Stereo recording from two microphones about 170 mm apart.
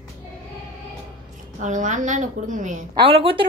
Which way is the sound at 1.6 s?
45° right (ahead or behind).